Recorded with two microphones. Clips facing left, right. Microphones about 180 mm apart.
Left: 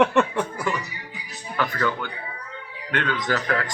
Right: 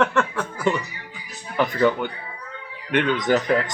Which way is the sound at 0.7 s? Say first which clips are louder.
Right 5 dB; 25° right (ahead or behind).